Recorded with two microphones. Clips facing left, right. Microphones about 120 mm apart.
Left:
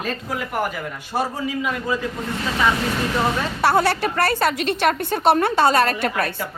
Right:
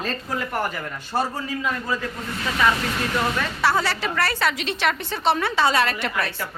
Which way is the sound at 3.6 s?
55° left (ahead or behind).